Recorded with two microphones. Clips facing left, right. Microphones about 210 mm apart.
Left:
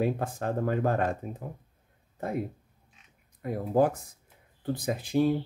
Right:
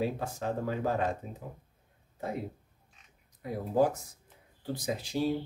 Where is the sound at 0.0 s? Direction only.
55° left (ahead or behind).